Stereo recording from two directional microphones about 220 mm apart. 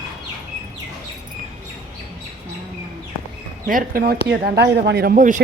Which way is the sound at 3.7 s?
40° right (ahead or behind).